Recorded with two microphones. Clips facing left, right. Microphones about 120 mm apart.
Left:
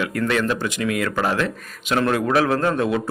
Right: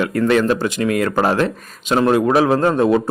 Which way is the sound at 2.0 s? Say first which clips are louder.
Right 5 dB; 25° right (ahead or behind).